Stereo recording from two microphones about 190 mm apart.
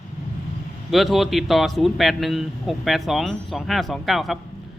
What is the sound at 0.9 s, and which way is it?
A man's voice, centre (ahead or behind).